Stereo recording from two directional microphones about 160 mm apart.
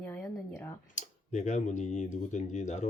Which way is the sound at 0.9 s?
50° left (ahead or behind).